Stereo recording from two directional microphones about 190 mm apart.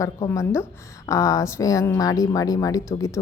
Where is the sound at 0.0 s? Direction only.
15° left (ahead or behind).